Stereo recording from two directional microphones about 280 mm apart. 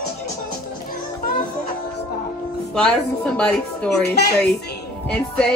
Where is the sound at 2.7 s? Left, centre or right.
Centre.